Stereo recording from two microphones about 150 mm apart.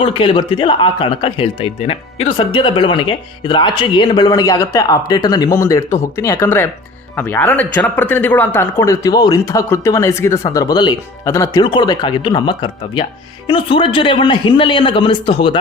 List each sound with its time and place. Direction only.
0.0 s speech: 35° left (ahead or behind)